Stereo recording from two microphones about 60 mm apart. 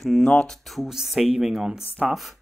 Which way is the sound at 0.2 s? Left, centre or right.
Centre.